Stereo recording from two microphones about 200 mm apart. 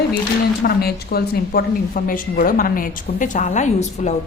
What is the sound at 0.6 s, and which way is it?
Speech, 50° left (ahead or behind).